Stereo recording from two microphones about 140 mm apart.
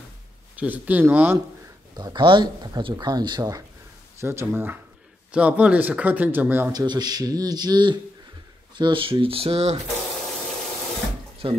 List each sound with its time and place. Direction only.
0.6 s speech: 10° right (ahead or behind)
2.0 s speech: 30° right (ahead or behind); by 6.7 s 15° right (ahead or behind)
6.7 s speech: 30° right (ahead or behind); by 9.8 s 45° right (ahead or behind)
11.4 s speech: 40° right (ahead or behind)